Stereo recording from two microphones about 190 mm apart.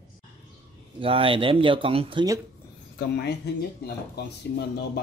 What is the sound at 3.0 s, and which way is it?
Speech, 60° left (ahead or behind).